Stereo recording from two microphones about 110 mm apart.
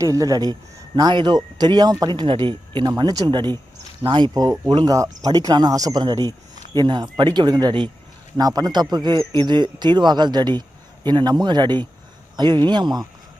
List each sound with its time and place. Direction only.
0.0 s speech: 30° right (ahead or behind)